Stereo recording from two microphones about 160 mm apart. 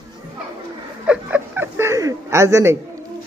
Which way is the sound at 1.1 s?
10° right (ahead or behind).